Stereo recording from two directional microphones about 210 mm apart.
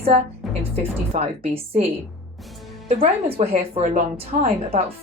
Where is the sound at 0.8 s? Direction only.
30° right (ahead or behind).